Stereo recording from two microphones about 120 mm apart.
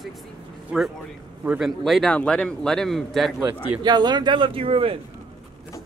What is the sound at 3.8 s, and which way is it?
Speech, 40° right (ahead or behind).